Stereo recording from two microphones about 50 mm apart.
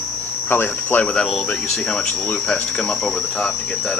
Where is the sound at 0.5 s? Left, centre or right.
Left.